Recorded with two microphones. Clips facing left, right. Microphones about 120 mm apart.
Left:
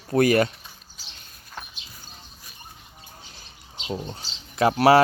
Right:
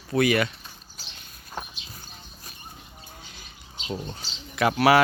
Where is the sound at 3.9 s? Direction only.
15° left (ahead or behind).